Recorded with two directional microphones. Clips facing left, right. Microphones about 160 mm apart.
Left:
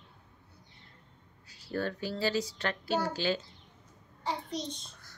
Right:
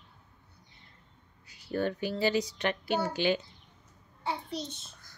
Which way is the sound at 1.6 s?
20° right (ahead or behind).